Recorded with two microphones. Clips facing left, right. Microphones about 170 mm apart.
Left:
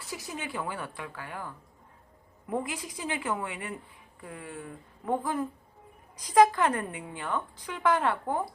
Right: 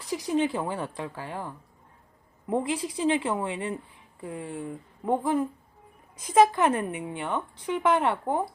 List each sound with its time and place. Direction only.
0.3 s a woman's voice: 30° right (ahead or behind)